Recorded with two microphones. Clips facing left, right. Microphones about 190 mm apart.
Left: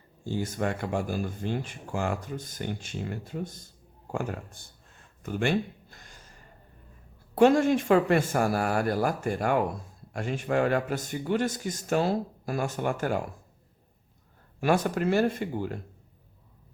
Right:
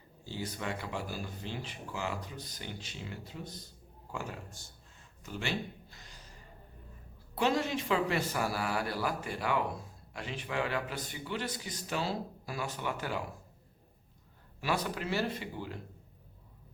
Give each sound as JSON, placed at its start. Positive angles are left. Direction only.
{"t": 0.3, "sound": "speech", "side_deg": 50}
{"t": 4.1, "sound": "a sound", "side_deg": 55}
{"t": 7.3, "sound": "speech", "side_deg": 50}
{"t": 14.6, "sound": "speech", "side_deg": 50}